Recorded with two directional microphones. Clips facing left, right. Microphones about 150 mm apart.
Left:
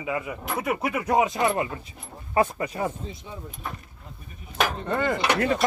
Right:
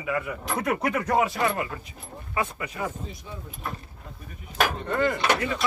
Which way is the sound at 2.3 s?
35° left (ahead or behind).